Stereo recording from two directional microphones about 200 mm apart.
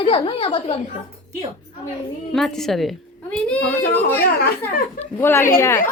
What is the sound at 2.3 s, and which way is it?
A woman's voice, centre (ahead or behind).